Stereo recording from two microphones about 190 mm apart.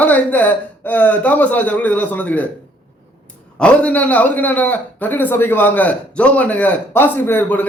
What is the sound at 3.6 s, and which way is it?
A man's voice, 5° left (ahead or behind).